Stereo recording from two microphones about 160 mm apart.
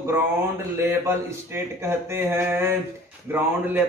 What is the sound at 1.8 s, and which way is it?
A man's voice, 15° right (ahead or behind).